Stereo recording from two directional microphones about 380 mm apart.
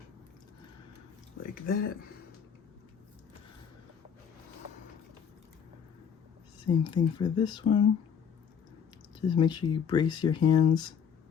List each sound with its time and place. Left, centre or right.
1.6 s speech: left
6.8 s speech: centre
9.2 s speech: centre